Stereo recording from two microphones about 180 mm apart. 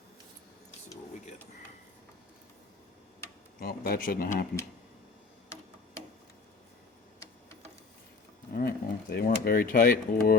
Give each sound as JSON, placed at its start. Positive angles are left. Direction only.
{"t": 3.6, "sound": "speech", "side_deg": 55}
{"t": 8.5, "sound": "speech", "side_deg": 60}